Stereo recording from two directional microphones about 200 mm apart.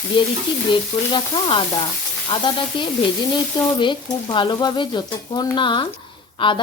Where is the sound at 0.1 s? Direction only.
25° left (ahead or behind).